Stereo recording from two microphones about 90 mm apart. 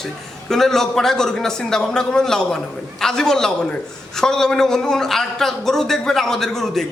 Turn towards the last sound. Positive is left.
turn(degrees=5)  # may be behind; listen again after turning